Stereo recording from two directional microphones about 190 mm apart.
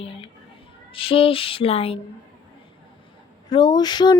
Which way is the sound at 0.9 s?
30° left (ahead or behind).